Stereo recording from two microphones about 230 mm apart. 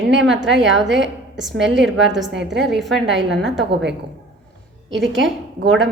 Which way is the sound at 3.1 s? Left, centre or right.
Right.